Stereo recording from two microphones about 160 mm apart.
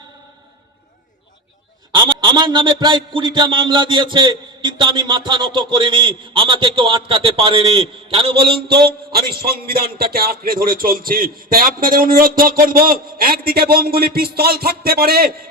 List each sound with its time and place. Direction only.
1.9 s a man's voice: 30° right (ahead or behind)
9.1 s a man's voice: 70° right (ahead or behind)